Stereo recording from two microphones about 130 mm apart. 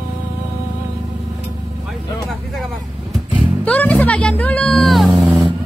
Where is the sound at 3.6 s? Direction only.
10° left (ahead or behind).